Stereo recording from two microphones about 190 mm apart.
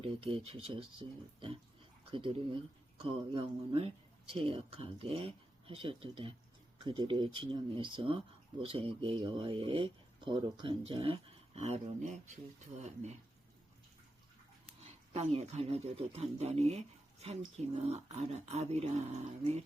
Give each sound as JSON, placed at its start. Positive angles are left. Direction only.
{"t": 0.0, "sound": "speech", "side_deg": -30}
{"t": 15.1, "sound": "speech", "side_deg": -35}